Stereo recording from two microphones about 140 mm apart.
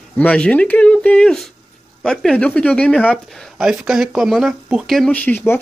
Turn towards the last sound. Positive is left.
turn(degrees=15)  # may be behind; listen again after turning